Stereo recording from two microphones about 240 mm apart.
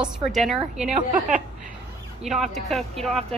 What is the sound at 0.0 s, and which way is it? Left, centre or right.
Speech, centre.